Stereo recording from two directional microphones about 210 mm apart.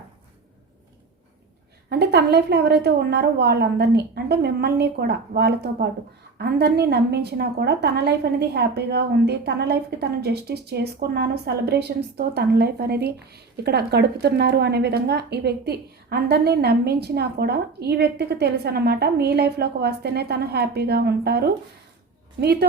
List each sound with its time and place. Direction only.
1.9 s a woman's voice: 50° right (ahead or behind)